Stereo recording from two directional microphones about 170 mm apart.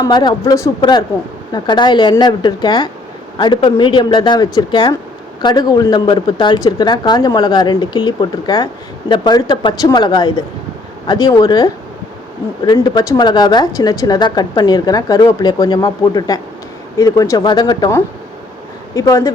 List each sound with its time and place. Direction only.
0.0 s a woman's voice: 25° left (ahead or behind)